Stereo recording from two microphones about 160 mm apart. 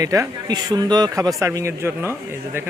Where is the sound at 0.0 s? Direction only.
20° right (ahead or behind).